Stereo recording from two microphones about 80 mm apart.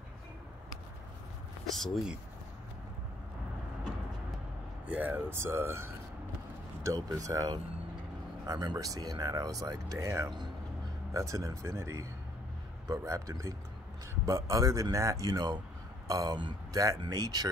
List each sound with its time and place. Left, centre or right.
1.7 s speech: centre
4.8 s speech: centre
7.0 s speech: right